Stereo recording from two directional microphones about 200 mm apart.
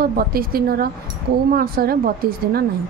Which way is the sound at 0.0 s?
50° right (ahead or behind).